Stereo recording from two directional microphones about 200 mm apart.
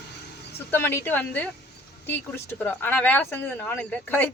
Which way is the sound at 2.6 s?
10° left (ahead or behind).